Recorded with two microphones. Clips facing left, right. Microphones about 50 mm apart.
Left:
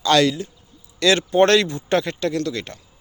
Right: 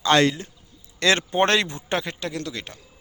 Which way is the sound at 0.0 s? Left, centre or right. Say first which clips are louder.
Left 2 dB; right.